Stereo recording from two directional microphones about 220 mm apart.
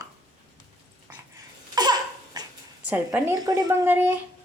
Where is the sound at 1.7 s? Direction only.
20° right (ahead or behind).